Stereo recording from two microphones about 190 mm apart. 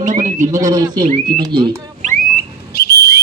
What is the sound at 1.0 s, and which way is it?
Speech, 45° right (ahead or behind).